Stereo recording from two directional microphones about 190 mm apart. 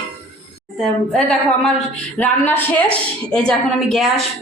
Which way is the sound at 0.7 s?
5° left (ahead or behind).